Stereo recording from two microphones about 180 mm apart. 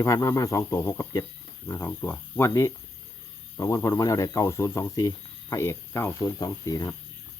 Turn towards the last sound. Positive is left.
turn(degrees=20)  # may be behind; listen again after turning